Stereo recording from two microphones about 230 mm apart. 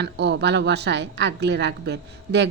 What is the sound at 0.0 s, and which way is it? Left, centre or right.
A woman's voice, right.